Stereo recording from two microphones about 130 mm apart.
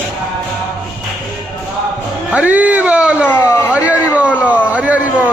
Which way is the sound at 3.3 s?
15° left (ahead or behind).